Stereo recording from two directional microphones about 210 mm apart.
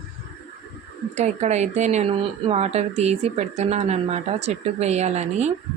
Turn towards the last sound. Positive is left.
turn(degrees=-35)  # may be behind; listen again after turning